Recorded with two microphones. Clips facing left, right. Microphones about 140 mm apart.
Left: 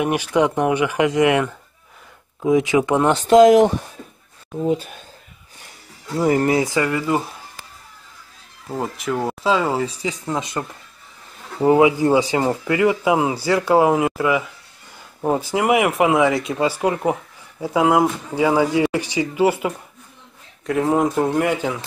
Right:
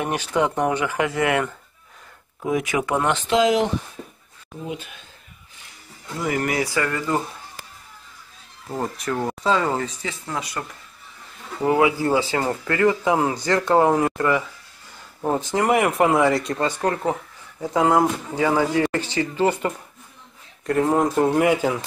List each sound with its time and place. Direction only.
0.0 s speech: 10° left (ahead or behind)
2.4 s speech: 20° left (ahead or behind)
3.0 s speech: 40° left (ahead or behind)
6.1 s speech: 35° left (ahead or behind); by 7.2 s 10° left (ahead or behind)
8.6 s speech: 5° left (ahead or behind); by 10.6 s 20° left (ahead or behind)
11.6 s speech: 20° left (ahead or behind); by 21.8 s 5° right (ahead or behind)